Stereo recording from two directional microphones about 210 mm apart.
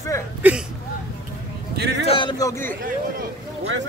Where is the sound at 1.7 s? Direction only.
50° right (ahead or behind).